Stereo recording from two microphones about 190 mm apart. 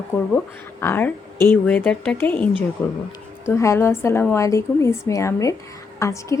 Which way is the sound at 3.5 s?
15° left (ahead or behind).